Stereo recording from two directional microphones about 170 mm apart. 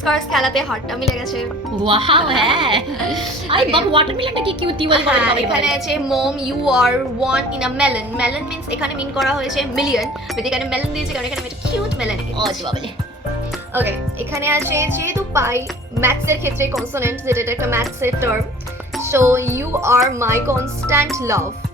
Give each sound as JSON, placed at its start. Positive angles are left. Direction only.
{"t": 0.0, "sound": "a woman's voice", "side_deg": 0}
{"t": 1.9, "sound": "a woman's voice", "side_deg": -30}
{"t": 5.0, "sound": "a woman's voice", "side_deg": -5}
{"t": 14.3, "sound": "a woman's voice", "side_deg": -15}